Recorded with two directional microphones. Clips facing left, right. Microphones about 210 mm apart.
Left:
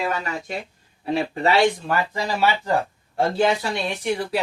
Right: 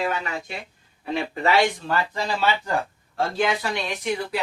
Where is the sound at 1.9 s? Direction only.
10° left (ahead or behind).